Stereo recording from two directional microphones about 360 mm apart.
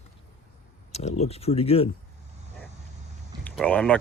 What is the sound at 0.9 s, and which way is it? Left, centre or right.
Speech, centre.